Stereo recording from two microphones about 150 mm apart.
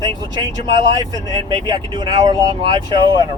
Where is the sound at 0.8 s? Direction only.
30° right (ahead or behind).